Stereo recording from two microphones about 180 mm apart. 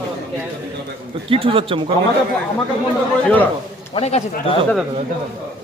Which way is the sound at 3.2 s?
10° left (ahead or behind).